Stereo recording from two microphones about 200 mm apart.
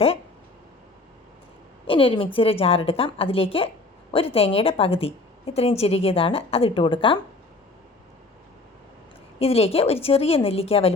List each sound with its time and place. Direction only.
1.9 s a woman's voice: 25° left (ahead or behind)
9.4 s a woman's voice: 30° left (ahead or behind)